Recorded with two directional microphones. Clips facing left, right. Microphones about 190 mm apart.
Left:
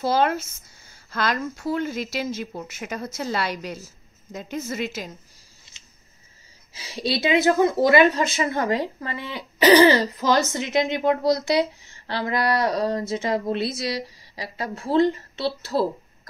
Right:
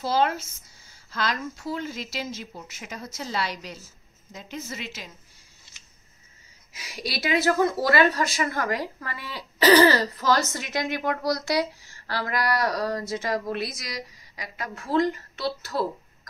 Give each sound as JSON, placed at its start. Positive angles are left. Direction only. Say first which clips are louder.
{"t": 0.0, "sound": "a woman's voice", "louder": "left 3 dB", "side_deg": 55}
{"t": 6.7, "sound": "speech", "louder": "left 7 dB", "side_deg": 30}